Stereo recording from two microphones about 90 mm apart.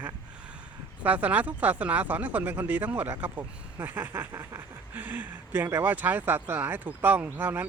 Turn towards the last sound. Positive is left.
turn(degrees=-20)  # may be behind; listen again after turning